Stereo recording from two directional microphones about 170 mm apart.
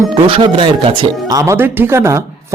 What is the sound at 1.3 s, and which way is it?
Speech, 20° right (ahead or behind).